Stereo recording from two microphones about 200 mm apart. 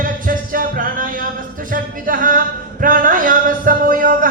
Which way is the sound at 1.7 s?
45° right (ahead or behind).